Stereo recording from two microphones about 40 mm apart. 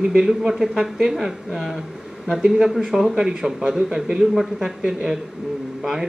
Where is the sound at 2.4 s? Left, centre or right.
Centre.